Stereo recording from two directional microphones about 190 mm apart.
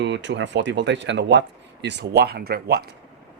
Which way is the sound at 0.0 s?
70° right (ahead or behind).